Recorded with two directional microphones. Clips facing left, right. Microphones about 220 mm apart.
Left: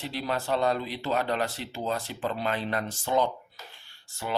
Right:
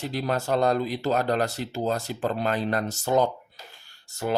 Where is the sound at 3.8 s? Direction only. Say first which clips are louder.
Right 7 dB; 40° right (ahead or behind).